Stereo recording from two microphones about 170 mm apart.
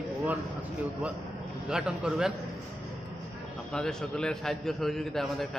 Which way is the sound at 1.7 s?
5° right (ahead or behind).